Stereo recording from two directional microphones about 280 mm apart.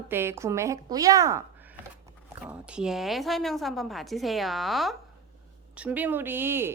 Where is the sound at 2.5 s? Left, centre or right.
Centre.